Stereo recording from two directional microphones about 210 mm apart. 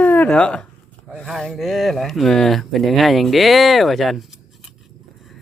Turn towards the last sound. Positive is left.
turn(degrees=0)  # may be behind; listen again after turning